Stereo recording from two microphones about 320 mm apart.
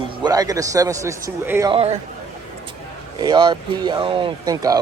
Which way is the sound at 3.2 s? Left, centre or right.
Centre.